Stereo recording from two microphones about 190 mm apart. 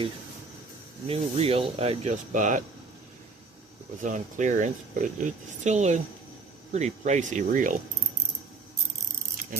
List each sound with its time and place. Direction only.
1.0 s speech: 30° right (ahead or behind)
4.0 s speech: 40° right (ahead or behind)